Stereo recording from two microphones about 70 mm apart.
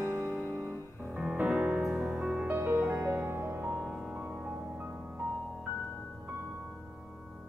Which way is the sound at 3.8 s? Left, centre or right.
Centre.